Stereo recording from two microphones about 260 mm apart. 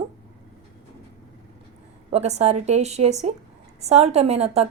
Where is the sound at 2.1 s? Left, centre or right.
Right.